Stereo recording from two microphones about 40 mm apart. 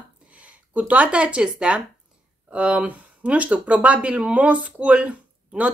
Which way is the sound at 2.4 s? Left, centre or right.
Right.